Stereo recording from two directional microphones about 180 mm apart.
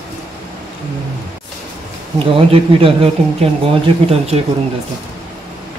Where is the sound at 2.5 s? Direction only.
30° right (ahead or behind).